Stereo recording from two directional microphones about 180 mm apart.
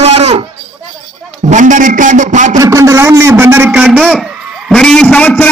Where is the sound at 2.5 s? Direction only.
15° right (ahead or behind).